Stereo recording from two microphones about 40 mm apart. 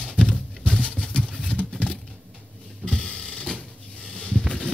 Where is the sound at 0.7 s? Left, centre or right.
Left.